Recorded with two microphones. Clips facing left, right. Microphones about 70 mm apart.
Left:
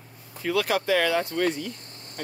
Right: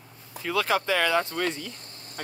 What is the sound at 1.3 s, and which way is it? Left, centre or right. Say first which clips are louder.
Speech: left 4 dB; right.